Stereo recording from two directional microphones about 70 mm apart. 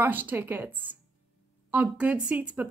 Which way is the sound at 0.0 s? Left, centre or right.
Right.